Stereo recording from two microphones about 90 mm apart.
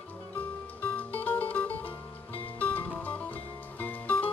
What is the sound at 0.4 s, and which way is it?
Music, 20° left (ahead or behind).